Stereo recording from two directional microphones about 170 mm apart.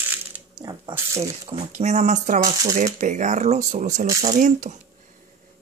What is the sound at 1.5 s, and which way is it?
Speech, 40° right (ahead or behind).